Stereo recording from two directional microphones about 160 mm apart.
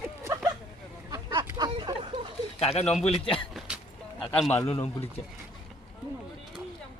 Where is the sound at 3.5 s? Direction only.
Centre (ahead or behind).